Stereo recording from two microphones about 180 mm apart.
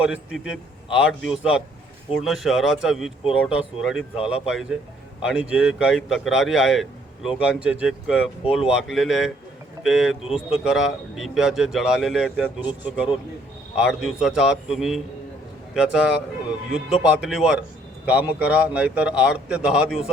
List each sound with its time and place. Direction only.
0.0 s a man's voice: 5° right (ahead or behind)